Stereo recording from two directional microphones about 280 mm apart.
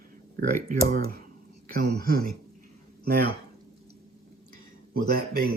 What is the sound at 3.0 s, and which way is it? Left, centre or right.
Speech, right.